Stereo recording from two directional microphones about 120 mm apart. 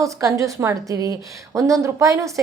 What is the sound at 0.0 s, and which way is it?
Speech, 25° right (ahead or behind).